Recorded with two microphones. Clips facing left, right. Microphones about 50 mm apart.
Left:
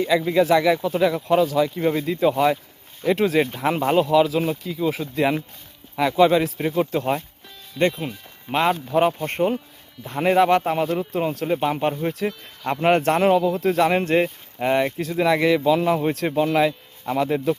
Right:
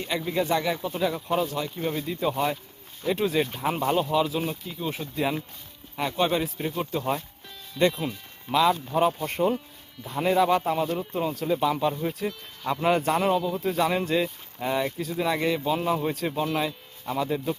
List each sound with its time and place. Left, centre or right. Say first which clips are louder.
0.2 s speech: left 8 dB; left
8.0 s speech: even; left
8.5 s speech: left 2 dB; left
9.1 s speech: left 3 dB; left
12.2 s speech: left 4 dB; left